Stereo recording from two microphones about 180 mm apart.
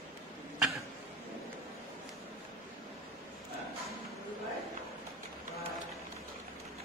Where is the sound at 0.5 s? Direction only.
Centre (ahead or behind).